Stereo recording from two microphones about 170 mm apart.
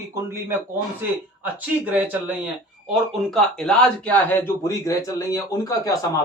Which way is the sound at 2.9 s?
Centre (ahead or behind).